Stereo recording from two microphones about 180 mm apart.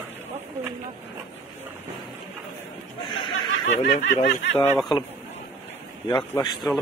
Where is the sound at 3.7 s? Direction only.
45° left (ahead or behind).